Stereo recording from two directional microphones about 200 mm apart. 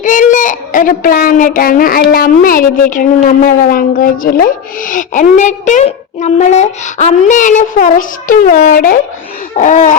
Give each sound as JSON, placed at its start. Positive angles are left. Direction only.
{"t": 0.0, "sound": "a woman's voice", "side_deg": 40}
{"t": 9.6, "sound": "laughter", "side_deg": 40}